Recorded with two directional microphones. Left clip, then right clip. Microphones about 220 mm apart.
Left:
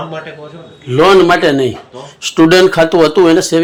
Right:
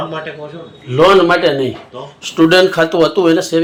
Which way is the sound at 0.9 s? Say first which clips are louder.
Left 2 dB; 45° left (ahead or behind).